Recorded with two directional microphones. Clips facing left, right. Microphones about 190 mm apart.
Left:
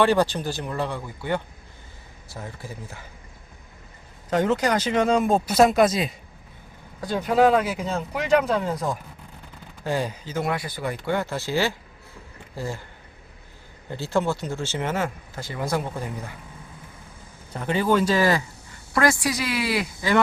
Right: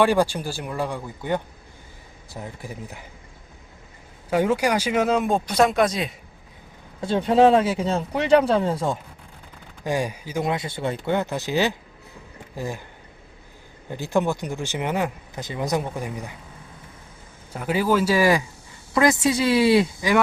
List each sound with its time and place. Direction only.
0.0 s speech: 10° right (ahead or behind)
4.3 s speech: 10° right (ahead or behind)
7.0 s speech: 30° right (ahead or behind)
9.8 s speech: 15° right (ahead or behind)
13.9 s speech: 15° right (ahead or behind)
17.5 s speech: 5° right (ahead or behind); by 19.9 s 25° right (ahead or behind)